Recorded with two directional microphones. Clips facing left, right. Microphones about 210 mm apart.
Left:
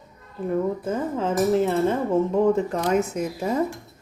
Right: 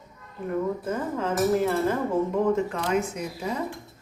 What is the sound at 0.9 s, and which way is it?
Speech, 30° left (ahead or behind).